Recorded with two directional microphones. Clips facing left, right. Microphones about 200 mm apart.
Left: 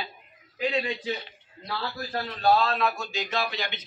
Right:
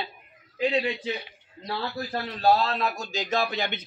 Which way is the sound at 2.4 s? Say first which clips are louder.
Even; 35° right (ahead or behind).